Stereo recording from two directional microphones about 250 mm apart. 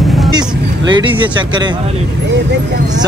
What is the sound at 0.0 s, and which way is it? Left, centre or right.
Vehicle, centre.